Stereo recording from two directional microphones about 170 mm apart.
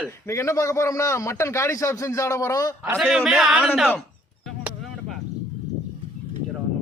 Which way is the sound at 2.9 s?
5° right (ahead or behind).